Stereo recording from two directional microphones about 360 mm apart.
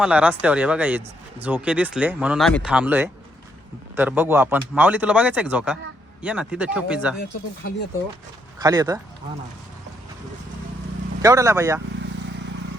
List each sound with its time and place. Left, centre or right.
0.0 s speech: centre
8.5 s speech: centre
11.2 s speech: centre
12.2 s vehicle: right